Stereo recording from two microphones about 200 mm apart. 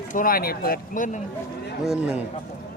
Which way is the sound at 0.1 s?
45° left (ahead or behind).